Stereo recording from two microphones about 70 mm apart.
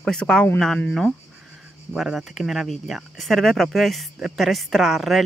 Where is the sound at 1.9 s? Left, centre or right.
Centre.